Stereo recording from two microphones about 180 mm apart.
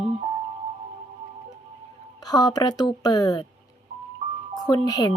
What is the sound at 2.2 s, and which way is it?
Speech, 20° left (ahead or behind).